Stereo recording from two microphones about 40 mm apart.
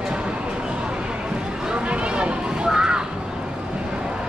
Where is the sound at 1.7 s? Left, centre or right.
Right.